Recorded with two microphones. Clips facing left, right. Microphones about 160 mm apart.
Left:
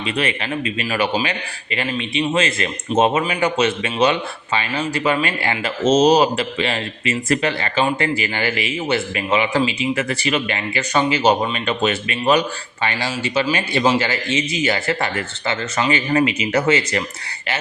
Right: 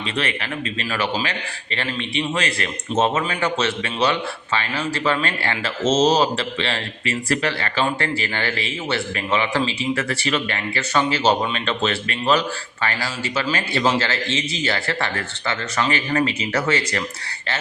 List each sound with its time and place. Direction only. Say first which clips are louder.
0.0 s speech: left 3 dB; 15° left (ahead or behind)